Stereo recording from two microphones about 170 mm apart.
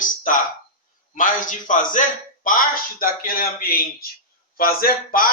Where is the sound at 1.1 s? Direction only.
50° left (ahead or behind).